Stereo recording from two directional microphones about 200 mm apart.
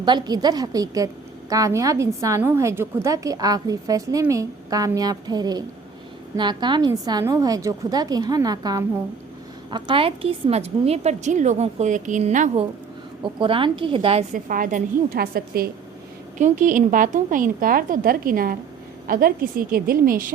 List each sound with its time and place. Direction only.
0.0 s a woman's voice: 20° right (ahead or behind)
13.2 s a woman's voice: 25° right (ahead or behind)
14.3 s a woman's voice: 45° right (ahead or behind)